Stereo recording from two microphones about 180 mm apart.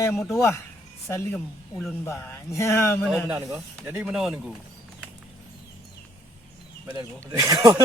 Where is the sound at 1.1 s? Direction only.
10° left (ahead or behind).